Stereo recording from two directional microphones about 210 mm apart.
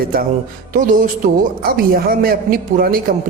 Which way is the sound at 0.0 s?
45° right (ahead or behind).